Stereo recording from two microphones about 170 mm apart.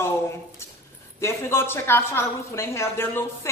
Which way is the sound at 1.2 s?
15° left (ahead or behind).